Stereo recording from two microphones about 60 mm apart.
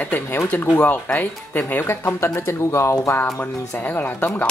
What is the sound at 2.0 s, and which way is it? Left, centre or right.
Speech, left.